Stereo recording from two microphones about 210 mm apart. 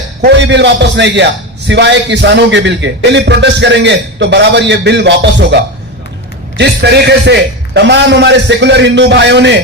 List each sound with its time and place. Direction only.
0.2 s a man's voice: 55° right (ahead or behind)
6.6 s a man's voice: 50° right (ahead or behind)